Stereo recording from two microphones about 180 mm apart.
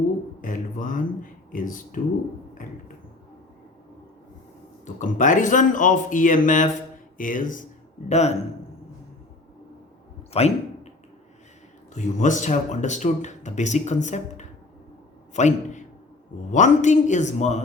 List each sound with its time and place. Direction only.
0.4 s speech: 50° left (ahead or behind)
4.9 s speech: 45° left (ahead or behind)
10.3 s a sound: 35° left (ahead or behind)
11.9 s speech: 40° left (ahead or behind)